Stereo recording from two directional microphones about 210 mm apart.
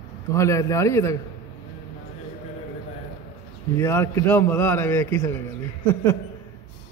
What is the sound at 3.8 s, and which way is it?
A man's voice, 15° left (ahead or behind).